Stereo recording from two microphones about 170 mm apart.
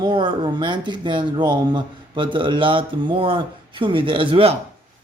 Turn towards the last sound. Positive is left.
turn(degrees=-30)  # may be behind; listen again after turning